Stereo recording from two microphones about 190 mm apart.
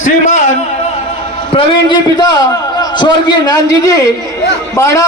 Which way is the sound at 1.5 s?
25° left (ahead or behind).